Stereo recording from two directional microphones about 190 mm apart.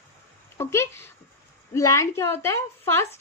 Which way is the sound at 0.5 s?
15° left (ahead or behind).